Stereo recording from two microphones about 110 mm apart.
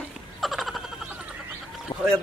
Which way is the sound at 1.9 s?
60° left (ahead or behind).